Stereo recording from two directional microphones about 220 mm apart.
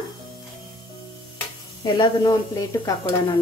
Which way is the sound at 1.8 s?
20° left (ahead or behind).